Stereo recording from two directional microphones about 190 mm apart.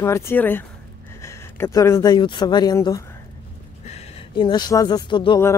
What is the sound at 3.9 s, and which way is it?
Speech, 30° left (ahead or behind).